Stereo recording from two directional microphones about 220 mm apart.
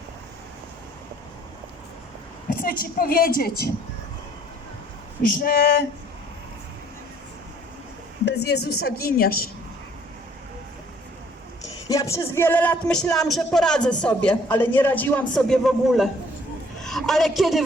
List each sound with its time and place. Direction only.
2.6 s a woman's voice: 40° left (ahead or behind)
5.2 s a woman's voice: 40° left (ahead or behind)
8.2 s a woman's voice: 50° left (ahead or behind)
11.9 s speech: 15° left (ahead or behind)
16.8 s a sound: centre (ahead or behind)